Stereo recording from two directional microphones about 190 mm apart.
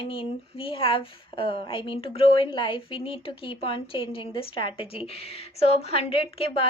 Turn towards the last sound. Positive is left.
turn(degrees=30)  # may be behind; listen again after turning